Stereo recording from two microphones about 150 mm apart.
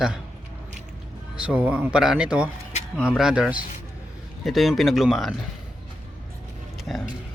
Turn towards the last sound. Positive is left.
turn(degrees=0)  # may be behind; listen again after turning